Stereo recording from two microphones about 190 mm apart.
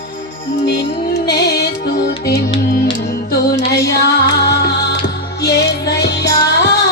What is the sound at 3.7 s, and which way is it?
Music, 60° left (ahead or behind).